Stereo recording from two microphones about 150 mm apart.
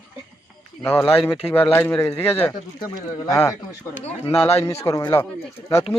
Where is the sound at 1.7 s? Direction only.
15° left (ahead or behind).